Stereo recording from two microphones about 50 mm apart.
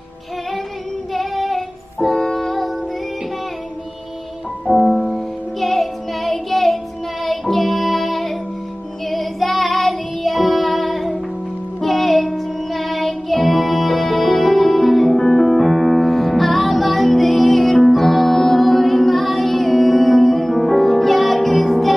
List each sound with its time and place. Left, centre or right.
1.1 s child singing: centre
4.6 s music: centre
5.0 s music: centre